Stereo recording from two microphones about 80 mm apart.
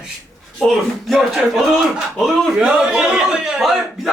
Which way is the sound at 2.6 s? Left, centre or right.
Centre.